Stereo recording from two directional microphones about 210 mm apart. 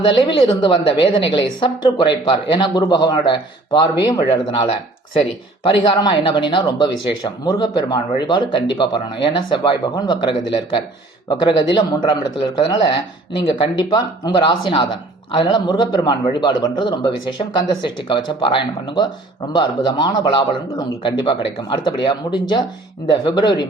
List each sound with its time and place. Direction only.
0.0 s speech: 25° left (ahead or behind)